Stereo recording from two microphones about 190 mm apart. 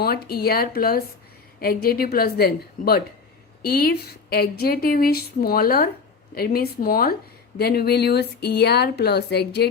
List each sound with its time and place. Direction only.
0.0 s speech: 55° left (ahead or behind)